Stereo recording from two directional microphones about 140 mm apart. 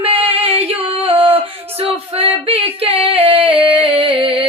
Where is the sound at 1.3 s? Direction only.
45° right (ahead or behind).